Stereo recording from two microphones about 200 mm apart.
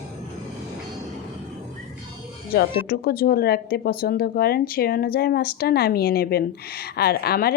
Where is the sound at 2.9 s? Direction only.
50° left (ahead or behind).